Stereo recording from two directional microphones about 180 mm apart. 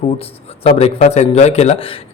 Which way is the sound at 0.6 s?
35° left (ahead or behind).